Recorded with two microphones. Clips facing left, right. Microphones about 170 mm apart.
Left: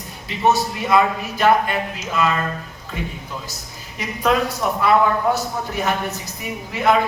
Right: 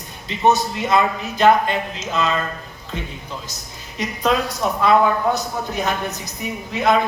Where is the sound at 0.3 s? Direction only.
20° right (ahead or behind).